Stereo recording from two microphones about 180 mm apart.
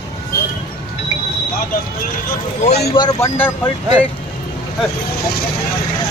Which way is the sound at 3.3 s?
10° left (ahead or behind).